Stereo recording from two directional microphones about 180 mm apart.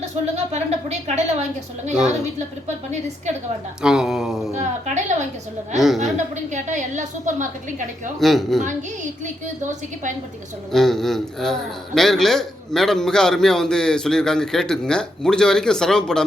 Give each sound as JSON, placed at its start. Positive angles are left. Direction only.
{"t": 0.0, "sound": "a woman's voice", "side_deg": -35}
{"t": 2.0, "sound": "a man's voice", "side_deg": -5}
{"t": 2.6, "sound": "a woman's voice", "side_deg": -40}
{"t": 3.8, "sound": "a man's voice", "side_deg": -5}
{"t": 4.5, "sound": "a woman's voice", "side_deg": -40}
{"t": 5.7, "sound": "a man's voice", "side_deg": 0}
{"t": 6.3, "sound": "a woman's voice", "side_deg": -45}
{"t": 8.2, "sound": "a man's voice", "side_deg": 0}
{"t": 10.7, "sound": "a man's voice", "side_deg": 0}